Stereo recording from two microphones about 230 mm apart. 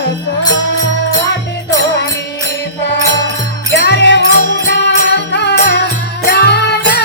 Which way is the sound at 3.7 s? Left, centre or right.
Left.